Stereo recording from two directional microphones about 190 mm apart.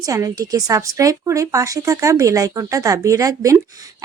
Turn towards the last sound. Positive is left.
turn(degrees=-15)  # may be behind; listen again after turning